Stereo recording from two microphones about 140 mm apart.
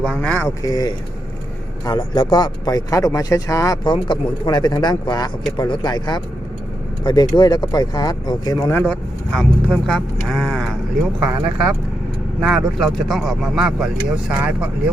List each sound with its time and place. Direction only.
0.0 s speech: 5° left (ahead or behind)
0.4 s speech: 25° left (ahead or behind)
8.7 s speech: 10° left (ahead or behind); by 14.7 s 10° right (ahead or behind)